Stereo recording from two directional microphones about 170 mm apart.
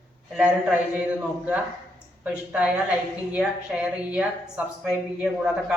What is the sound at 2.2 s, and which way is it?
Speech, 5° right (ahead or behind).